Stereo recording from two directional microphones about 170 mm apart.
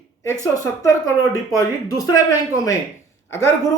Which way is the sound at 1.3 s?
20° left (ahead or behind).